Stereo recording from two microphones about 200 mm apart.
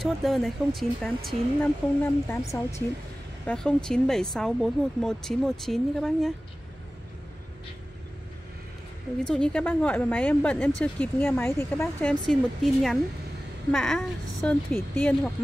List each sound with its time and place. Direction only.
0.0 s speech: centre (ahead or behind)
2.2 s speech: 15° left (ahead or behind)
3.4 s speech: 5° left (ahead or behind)
9.2 s speech: 5° left (ahead or behind)